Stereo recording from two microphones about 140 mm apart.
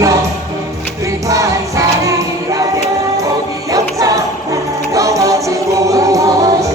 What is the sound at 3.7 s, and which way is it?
Music, 25° right (ahead or behind).